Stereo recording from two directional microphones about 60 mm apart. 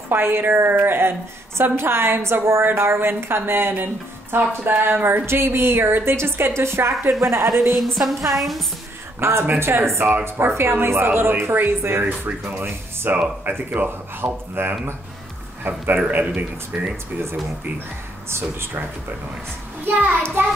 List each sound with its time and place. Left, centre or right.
0.1 s a woman's voice: right
7.7 s a sound: centre
9.2 s a woman's voice: right
13.1 s a woman's voice: right
16.9 s a woman's voice: right
19.8 s a child's voice: right